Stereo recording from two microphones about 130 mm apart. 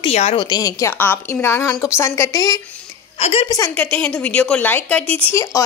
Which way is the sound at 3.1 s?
50° left (ahead or behind).